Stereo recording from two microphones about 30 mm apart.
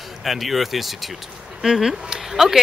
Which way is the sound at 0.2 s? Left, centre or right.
Centre.